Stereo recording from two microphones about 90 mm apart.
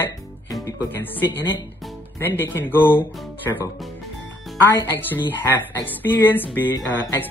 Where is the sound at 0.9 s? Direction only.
25° left (ahead or behind).